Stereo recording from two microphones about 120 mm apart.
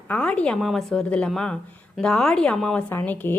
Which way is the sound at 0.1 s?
10° left (ahead or behind).